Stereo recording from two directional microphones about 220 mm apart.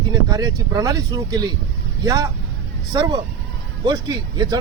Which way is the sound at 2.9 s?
20° right (ahead or behind).